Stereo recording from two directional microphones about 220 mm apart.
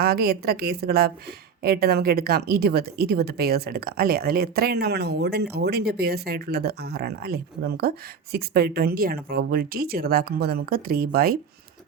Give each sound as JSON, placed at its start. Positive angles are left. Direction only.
{"t": 0.0, "sound": "a woman's voice", "side_deg": -45}